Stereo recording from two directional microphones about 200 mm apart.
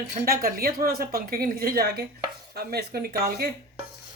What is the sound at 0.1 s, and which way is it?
Speech, 45° right (ahead or behind).